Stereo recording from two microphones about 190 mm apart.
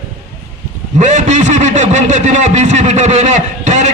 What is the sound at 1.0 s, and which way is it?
A man's voice, 40° right (ahead or behind).